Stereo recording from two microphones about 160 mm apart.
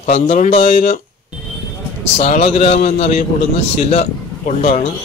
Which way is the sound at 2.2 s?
40° left (ahead or behind).